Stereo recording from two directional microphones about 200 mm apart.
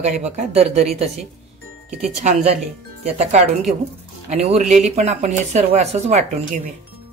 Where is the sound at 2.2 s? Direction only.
30° right (ahead or behind).